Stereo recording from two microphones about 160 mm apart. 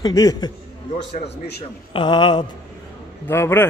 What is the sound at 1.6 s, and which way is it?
Speech, 35° left (ahead or behind).